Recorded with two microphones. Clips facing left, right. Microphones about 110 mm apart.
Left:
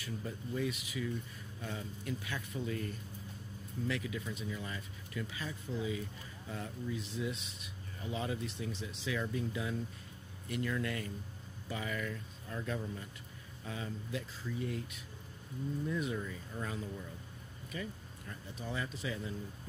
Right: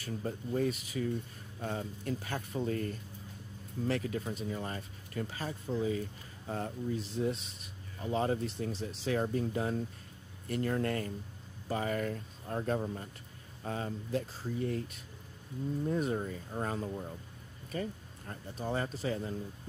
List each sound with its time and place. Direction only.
0.0 s speech: 45° right (ahead or behind)